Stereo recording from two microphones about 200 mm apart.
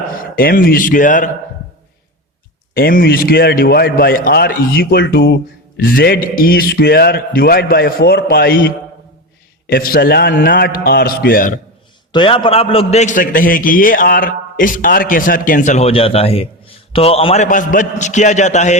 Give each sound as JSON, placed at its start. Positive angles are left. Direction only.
{"t": 0.3, "sound": "a man's voice", "side_deg": 45}
{"t": 2.7, "sound": "a man's voice", "side_deg": 50}
{"t": 12.1, "sound": "a man's voice", "side_deg": 25}